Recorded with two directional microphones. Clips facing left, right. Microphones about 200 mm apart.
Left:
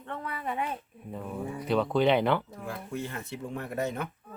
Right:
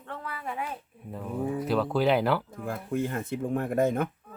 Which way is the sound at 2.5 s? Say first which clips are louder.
Right 5 dB; 50° right (ahead or behind).